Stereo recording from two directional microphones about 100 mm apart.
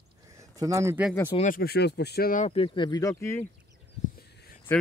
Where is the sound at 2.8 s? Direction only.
40° left (ahead or behind).